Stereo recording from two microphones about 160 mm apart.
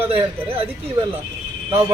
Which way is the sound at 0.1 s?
35° right (ahead or behind).